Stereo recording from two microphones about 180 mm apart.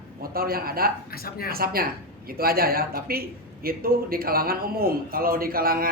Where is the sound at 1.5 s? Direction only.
55° right (ahead or behind).